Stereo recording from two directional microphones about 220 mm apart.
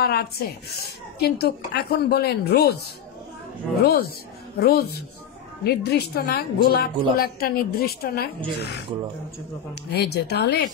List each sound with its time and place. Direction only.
0.0 s a woman's voice: 45° left (ahead or behind)
3.8 s a woman's voice: 45° left (ahead or behind)
9.8 s a woman's voice: 45° left (ahead or behind)